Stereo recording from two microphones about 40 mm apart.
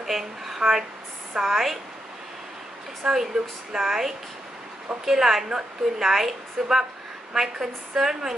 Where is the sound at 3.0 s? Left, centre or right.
Centre.